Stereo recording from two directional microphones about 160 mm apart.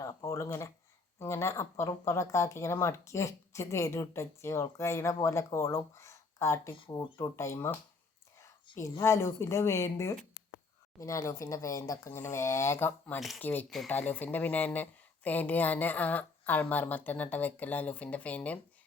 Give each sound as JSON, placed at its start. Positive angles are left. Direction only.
{"t": 0.0, "sound": "speech", "side_deg": 20}
{"t": 6.7, "sound": "speech", "side_deg": 30}
{"t": 13.1, "sound": "speech", "side_deg": 0}
{"t": 13.4, "sound": "speech", "side_deg": 10}